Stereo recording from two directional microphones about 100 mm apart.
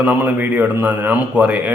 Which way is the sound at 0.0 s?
15° right (ahead or behind).